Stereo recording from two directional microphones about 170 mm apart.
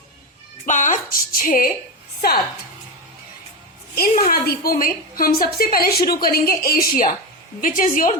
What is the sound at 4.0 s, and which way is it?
A woman's voice, 60° left (ahead or behind).